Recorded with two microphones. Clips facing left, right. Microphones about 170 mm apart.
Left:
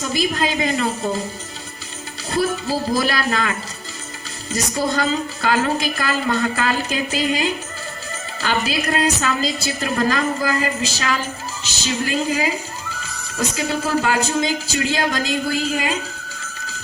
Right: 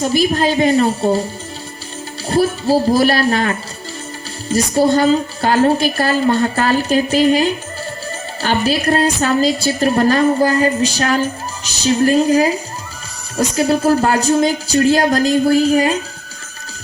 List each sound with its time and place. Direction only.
0.0 s a woman's voice: 35° right (ahead or behind)
2.3 s a woman's voice: 30° right (ahead or behind)